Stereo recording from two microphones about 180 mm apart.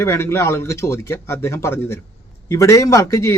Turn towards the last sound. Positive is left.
turn(degrees=15)  # may be behind; listen again after turning